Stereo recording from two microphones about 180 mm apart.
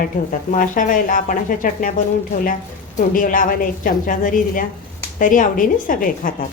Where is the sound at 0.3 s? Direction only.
45° left (ahead or behind).